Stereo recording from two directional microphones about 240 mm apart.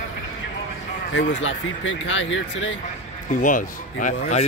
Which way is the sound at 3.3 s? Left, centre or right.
Left.